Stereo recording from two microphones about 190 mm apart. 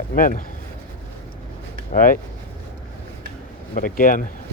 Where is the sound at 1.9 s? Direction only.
45° left (ahead or behind).